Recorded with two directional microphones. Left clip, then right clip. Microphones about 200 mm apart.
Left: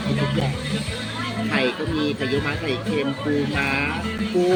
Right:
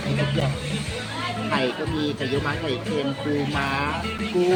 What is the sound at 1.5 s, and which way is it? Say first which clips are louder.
Speech: left 3 dB; 15° right (ahead or behind).